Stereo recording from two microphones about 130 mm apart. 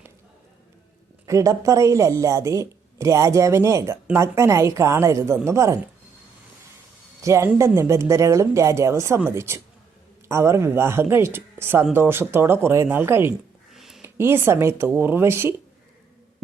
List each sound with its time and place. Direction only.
1.3 s speech: 25° right (ahead or behind)
7.2 s speech: 20° right (ahead or behind)
13.7 s a sound: centre (ahead or behind)
14.0 s speech: 20° right (ahead or behind)